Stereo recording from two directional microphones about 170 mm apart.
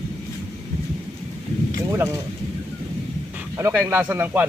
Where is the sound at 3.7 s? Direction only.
10° right (ahead or behind).